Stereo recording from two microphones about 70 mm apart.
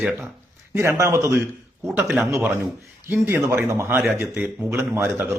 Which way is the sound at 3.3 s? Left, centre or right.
Right.